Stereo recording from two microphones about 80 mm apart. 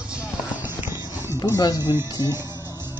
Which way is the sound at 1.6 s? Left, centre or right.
Left.